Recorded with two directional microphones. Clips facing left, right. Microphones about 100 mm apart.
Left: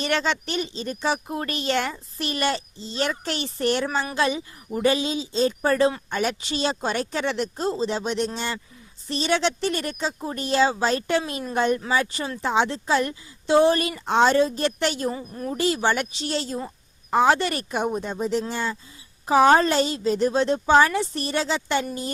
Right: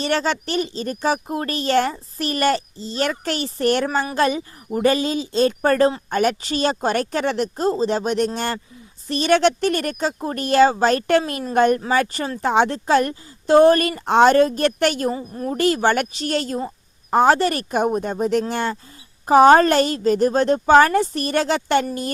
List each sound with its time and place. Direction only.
0.0 s speech: 40° right (ahead or behind); by 18.8 s 60° right (ahead or behind)
19.2 s speech: 50° right (ahead or behind)